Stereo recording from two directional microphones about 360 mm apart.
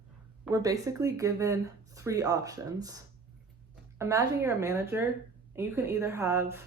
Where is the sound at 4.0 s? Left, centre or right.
Centre.